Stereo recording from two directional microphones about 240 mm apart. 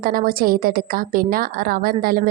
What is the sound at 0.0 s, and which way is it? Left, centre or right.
A woman's voice, right.